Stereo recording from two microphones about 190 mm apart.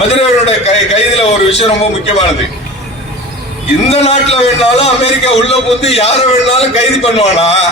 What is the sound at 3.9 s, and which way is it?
A man's voice, 35° left (ahead or behind).